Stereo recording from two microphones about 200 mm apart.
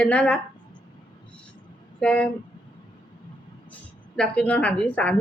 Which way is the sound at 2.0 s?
5° left (ahead or behind).